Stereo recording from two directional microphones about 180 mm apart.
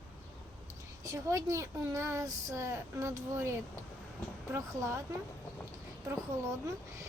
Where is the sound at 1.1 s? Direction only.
15° right (ahead or behind).